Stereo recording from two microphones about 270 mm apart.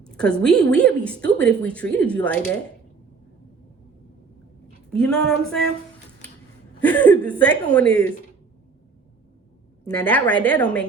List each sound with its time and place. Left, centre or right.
0.0 s a woman's voice: centre
4.9 s a woman's voice: centre
6.8 s a woman's voice: centre
9.8 s a woman's voice: centre